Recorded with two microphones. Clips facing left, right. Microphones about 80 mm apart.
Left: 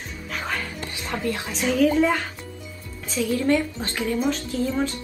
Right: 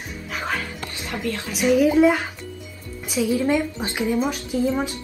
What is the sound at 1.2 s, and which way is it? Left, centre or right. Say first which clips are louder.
Speech: even; left.